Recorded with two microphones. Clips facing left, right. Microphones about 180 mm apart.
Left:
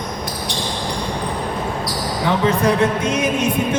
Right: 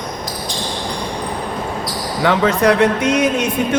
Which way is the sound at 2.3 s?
75° right (ahead or behind).